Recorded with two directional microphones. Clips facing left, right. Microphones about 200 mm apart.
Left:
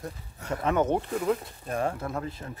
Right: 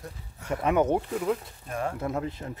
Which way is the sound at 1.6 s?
35° left (ahead or behind).